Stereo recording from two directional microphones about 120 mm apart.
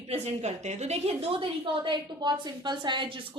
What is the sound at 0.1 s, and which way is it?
A woman's voice, 65° right (ahead or behind).